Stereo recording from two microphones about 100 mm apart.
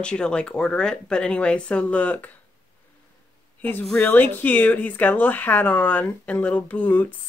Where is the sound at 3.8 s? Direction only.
10° left (ahead or behind).